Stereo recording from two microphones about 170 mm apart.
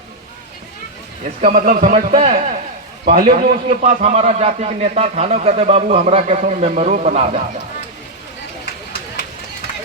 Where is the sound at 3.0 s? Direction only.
55° right (ahead or behind).